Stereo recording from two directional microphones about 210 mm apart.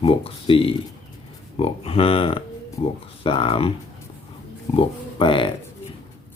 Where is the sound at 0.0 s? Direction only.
25° left (ahead or behind).